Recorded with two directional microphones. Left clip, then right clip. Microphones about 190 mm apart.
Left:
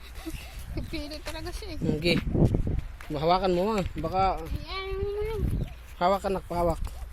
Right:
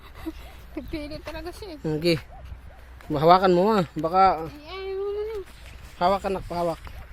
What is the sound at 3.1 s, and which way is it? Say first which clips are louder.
Speech: right 7 dB; 35° right (ahead or behind).